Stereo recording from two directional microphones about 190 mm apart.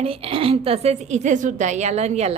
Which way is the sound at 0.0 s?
30° right (ahead or behind).